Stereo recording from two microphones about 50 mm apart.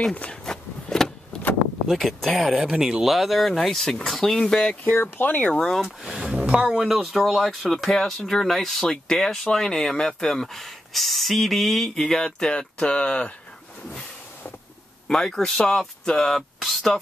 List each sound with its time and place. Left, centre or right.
0.1 s speech: left
0.5 s a sound: centre
1.9 s speech: centre
2.5 s speech: centre
4.8 s speech: left
5.5 s speech: centre
6.3 s speech: right
6.9 s speech: centre; by 13.3 s left
15.0 s speech: centre
16.3 s speech: centre